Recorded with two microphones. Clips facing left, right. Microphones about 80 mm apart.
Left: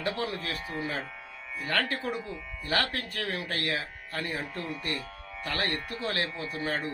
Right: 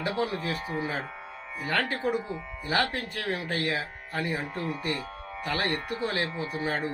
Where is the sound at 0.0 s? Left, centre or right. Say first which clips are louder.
Right 3 dB; centre.